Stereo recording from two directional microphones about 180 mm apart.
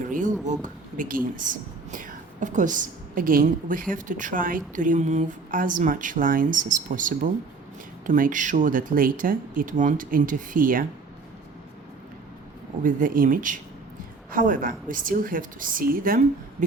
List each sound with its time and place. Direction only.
0.1 s speech: 45° right (ahead or behind)
12.8 s speech: 50° right (ahead or behind)